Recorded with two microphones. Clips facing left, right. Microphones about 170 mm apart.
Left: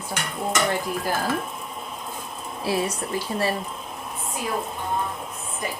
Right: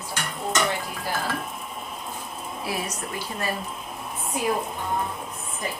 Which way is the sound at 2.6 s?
30° left (ahead or behind).